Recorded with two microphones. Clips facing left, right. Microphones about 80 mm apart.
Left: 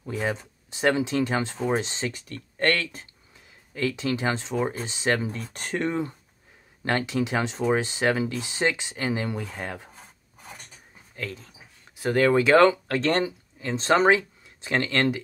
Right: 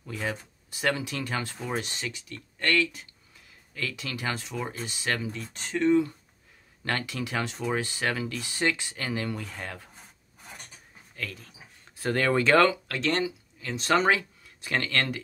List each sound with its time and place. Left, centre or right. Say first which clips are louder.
0.0 s speech: left 5 dB; left
2.0 s speech: left 5 dB; left
3.7 s speech: left 8 dB; left
5.2 s speech: left 3 dB; left
6.8 s speech: left 6 dB; left
11.1 s speech: left 3 dB; left
12.0 s speech: left 4 dB; centre
12.6 s speech: left 5 dB; left